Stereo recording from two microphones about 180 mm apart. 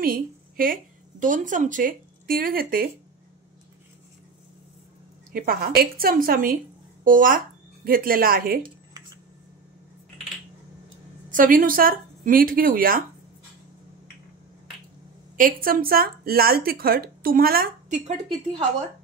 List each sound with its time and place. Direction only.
0.0 s a woman's voice: 50° right (ahead or behind)
5.3 s speech: 55° right (ahead or behind)
11.2 s speech: 50° right (ahead or behind)
15.3 s speech: 50° right (ahead or behind)